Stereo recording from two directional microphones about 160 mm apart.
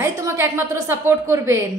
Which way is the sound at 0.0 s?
15° right (ahead or behind).